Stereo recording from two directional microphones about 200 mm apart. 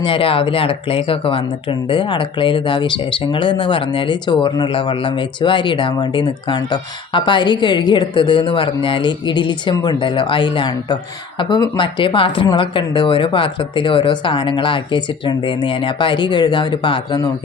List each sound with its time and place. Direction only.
0.0 s speech: 25° left (ahead or behind)